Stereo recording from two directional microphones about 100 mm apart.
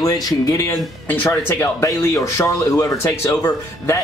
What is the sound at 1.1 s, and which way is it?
Speech, 20° left (ahead or behind).